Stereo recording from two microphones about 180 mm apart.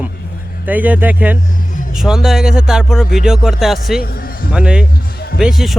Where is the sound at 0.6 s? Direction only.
10° right (ahead or behind).